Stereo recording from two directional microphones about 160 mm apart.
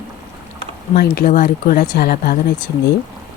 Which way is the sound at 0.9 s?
80° left.